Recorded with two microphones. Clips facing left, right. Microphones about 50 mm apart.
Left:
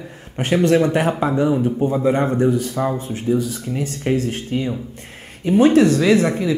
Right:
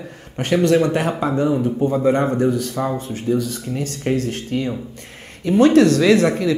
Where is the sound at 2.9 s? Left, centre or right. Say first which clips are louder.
Even; left.